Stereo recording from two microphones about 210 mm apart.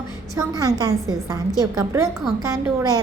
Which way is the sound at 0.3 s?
15° right (ahead or behind).